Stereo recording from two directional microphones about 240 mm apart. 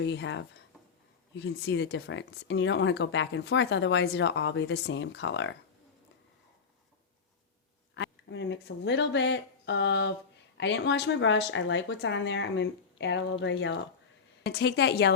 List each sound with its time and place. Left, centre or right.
0.0 s speech: left
7.9 s speech: left